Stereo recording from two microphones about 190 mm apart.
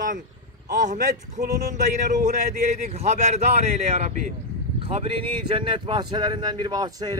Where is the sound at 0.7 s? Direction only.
40° right (ahead or behind).